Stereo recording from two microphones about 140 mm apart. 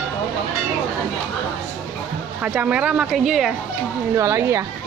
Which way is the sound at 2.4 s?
10° right (ahead or behind).